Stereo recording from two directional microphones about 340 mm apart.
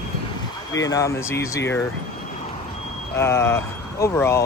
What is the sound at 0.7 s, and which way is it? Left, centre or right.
Speech, centre.